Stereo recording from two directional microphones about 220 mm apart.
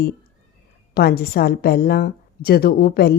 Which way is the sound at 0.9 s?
45° left (ahead or behind).